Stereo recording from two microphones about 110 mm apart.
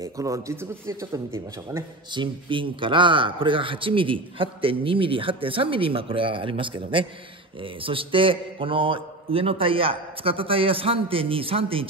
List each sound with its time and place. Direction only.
0.0 s speech: 30° right (ahead or behind)
2.1 s a man's voice: 50° right (ahead or behind)